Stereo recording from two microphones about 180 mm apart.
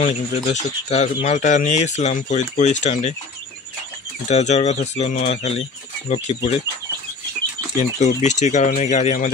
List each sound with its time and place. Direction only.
0.0 s speech: 40° left (ahead or behind)
4.3 s speech: 35° left (ahead or behind)
8.0 s speech: 40° left (ahead or behind)